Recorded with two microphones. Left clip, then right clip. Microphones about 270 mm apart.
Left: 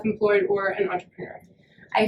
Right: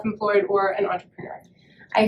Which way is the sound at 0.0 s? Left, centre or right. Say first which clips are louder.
Even; centre.